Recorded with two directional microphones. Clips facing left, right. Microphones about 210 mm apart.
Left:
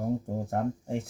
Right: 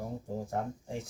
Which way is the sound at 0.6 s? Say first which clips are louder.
Left 7 dB; 55° left (ahead or behind).